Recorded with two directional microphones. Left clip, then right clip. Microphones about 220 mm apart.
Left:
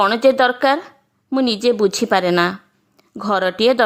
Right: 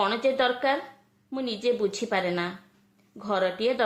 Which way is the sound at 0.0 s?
45° left (ahead or behind).